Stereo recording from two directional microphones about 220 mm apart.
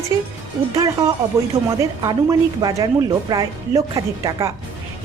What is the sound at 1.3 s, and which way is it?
A woman's voice, 15° right (ahead or behind).